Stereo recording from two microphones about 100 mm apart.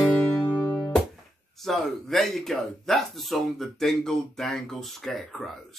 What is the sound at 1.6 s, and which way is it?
Speech, 5° left (ahead or behind).